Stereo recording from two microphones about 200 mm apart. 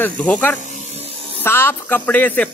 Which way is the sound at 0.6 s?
35° right (ahead or behind).